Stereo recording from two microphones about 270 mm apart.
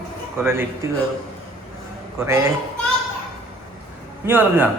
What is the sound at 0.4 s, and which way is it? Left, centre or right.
Speech, centre.